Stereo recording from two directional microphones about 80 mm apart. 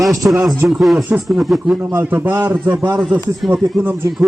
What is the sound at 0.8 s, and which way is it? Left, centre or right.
A man's voice, centre.